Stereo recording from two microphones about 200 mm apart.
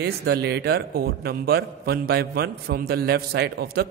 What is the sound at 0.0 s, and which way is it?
A man's voice, 55° right (ahead or behind).